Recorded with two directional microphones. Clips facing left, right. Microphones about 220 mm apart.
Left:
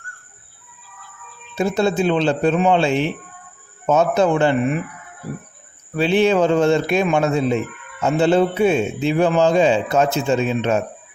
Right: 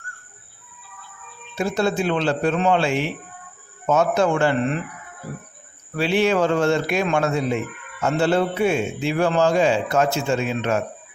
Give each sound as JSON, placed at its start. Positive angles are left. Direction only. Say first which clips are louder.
{"t": 1.5, "sound": "a man's voice", "louder": "left 3 dB", "side_deg": 25}
{"t": 6.0, "sound": "a man's voice", "louder": "left 3 dB", "side_deg": 20}